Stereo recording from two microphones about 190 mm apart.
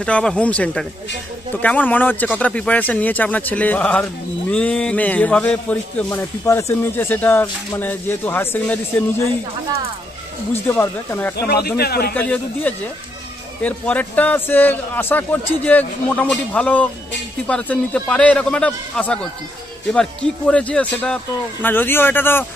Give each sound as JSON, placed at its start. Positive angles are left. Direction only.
{"t": 0.0, "sound": "a man's voice", "side_deg": 5}
{"t": 10.5, "sound": "speech", "side_deg": 10}
{"t": 11.3, "sound": "speech", "side_deg": 55}
{"t": 12.1, "sound": "speech", "side_deg": 10}